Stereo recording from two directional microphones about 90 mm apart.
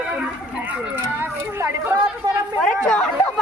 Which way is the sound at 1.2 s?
25° right (ahead or behind).